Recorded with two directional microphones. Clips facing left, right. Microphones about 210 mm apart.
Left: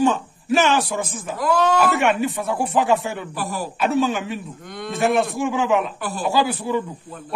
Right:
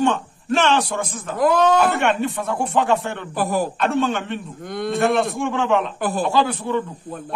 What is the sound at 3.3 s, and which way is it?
Speech, 50° right (ahead or behind).